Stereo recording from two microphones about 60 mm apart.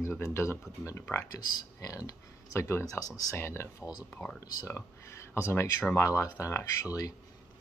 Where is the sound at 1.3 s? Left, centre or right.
Left.